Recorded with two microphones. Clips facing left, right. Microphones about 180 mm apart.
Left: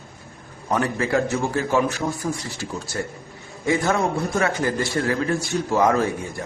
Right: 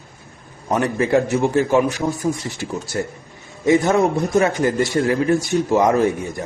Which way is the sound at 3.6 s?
20° right (ahead or behind).